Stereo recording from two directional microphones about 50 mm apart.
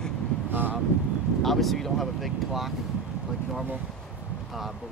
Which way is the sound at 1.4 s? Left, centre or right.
Centre.